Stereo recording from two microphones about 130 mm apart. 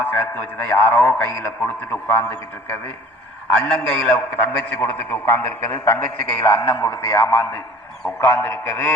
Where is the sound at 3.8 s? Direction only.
15° left (ahead or behind).